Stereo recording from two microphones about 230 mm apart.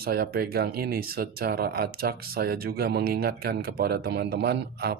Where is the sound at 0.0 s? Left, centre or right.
Right.